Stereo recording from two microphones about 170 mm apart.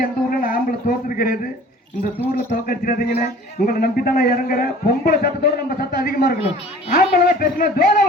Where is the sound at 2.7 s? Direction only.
60° left (ahead or behind).